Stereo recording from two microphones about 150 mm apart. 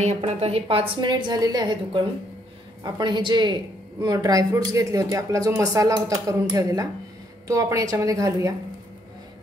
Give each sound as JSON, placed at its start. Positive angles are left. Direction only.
{"t": 0.0, "sound": "a woman's voice", "side_deg": -50}